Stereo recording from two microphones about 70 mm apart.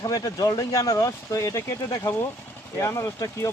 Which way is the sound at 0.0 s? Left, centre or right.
Left.